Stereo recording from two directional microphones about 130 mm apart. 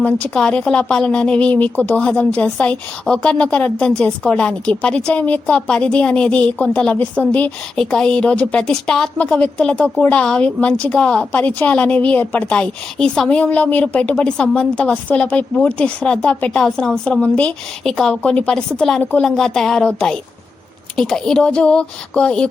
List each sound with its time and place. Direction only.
0.0 s a woman's voice: 10° left (ahead or behind)